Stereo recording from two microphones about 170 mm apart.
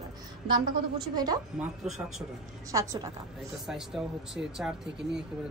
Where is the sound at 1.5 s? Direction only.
5° right (ahead or behind).